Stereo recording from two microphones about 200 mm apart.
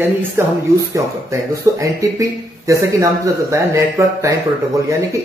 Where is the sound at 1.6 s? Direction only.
15° right (ahead or behind).